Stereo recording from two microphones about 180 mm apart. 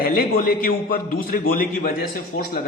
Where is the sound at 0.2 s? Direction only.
50° left (ahead or behind).